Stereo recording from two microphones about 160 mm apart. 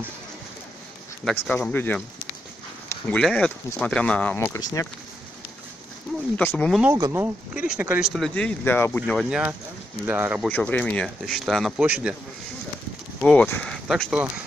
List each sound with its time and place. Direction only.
1.5 s speech: 10° left (ahead or behind)
2.9 s a sound: 10° left (ahead or behind)
3.3 s speech: 5° left (ahead or behind)
4.6 s speech: 20° left (ahead or behind)
6.3 s speech: 10° left (ahead or behind)
6.9 s speech: 15° right (ahead or behind); by 9.0 s 15° left (ahead or behind)
9.0 s speech: centre (ahead or behind)
10.0 s speech: 10° right (ahead or behind)
10.5 s speech: 5° left (ahead or behind); by 12.2 s 10° right (ahead or behind)
13.2 s speech: 5° left (ahead or behind)